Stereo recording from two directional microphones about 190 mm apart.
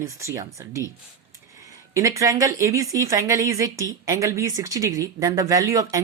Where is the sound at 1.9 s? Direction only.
15° right (ahead or behind).